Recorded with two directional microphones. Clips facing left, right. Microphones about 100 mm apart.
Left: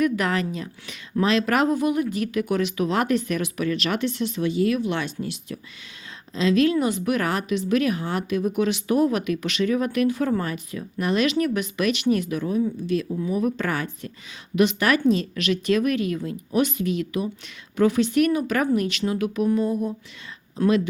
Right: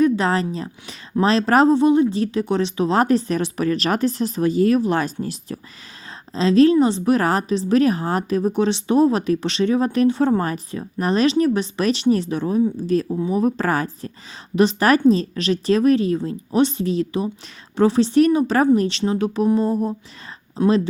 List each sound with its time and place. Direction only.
0.0 s a woman's voice: 30° right (ahead or behind)
20.6 s speech: 20° right (ahead or behind)